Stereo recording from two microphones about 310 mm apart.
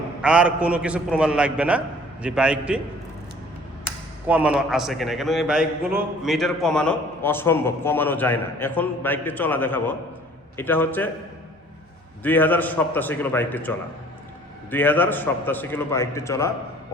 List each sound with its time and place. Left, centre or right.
0.2 s a man's voice: centre
4.3 s a man's voice: centre
12.2 s a man's voice: centre